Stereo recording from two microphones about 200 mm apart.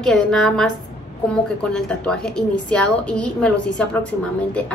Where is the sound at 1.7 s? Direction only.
5° left (ahead or behind).